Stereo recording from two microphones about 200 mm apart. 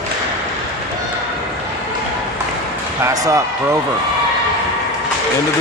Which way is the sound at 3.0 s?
15° right (ahead or behind).